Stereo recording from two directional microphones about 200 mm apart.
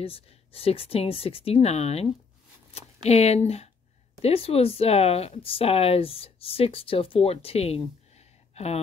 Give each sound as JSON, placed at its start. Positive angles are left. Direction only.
{"t": 0.0, "sound": "speech", "side_deg": 30}